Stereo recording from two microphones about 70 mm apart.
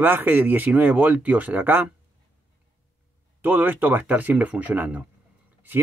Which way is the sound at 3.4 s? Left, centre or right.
Right.